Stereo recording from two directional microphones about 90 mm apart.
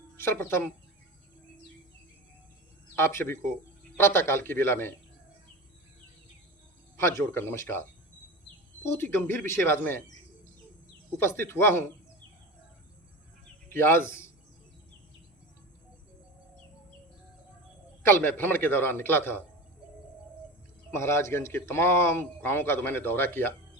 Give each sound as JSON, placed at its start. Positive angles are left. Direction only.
{"t": 0.2, "sound": "speech", "side_deg": 25}
{"t": 3.0, "sound": "speech", "side_deg": 30}
{"t": 6.9, "sound": "speech", "side_deg": 30}
{"t": 11.2, "sound": "speech", "side_deg": 25}
{"t": 13.7, "sound": "speech", "side_deg": 25}
{"t": 18.0, "sound": "speech", "side_deg": 25}
{"t": 20.9, "sound": "speech", "side_deg": 30}